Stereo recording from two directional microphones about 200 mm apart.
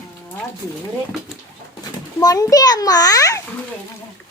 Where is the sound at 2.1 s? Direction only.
15° left (ahead or behind).